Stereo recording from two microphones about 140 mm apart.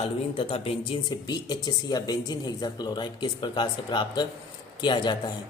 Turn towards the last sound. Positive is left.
turn(degrees=30)  # may be behind; listen again after turning